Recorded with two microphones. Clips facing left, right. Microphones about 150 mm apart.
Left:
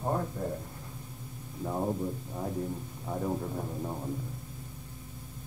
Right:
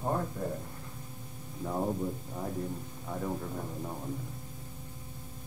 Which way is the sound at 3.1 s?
15° left (ahead or behind).